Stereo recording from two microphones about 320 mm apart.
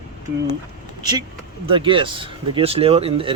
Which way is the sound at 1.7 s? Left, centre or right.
Centre.